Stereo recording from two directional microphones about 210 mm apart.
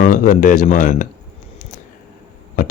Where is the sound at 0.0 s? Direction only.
40° left (ahead or behind).